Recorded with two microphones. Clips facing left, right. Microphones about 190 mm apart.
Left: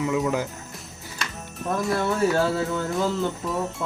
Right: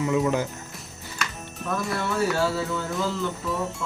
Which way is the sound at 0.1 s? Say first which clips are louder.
Right 4 dB; 10° left (ahead or behind).